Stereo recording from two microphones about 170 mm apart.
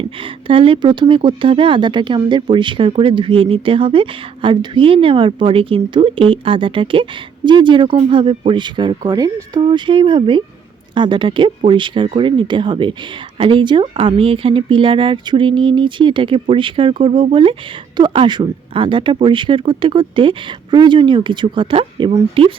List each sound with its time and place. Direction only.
0.2 s speech: 30° right (ahead or behind)